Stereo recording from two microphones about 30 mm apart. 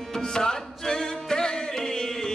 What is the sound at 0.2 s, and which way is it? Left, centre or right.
Music, left.